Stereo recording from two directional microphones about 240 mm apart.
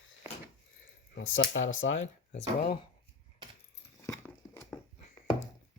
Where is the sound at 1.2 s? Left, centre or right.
Left.